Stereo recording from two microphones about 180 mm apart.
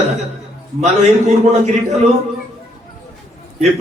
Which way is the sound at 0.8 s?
40° right (ahead or behind).